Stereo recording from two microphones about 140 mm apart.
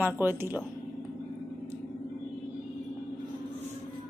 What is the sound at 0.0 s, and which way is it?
Speech, 15° right (ahead or behind).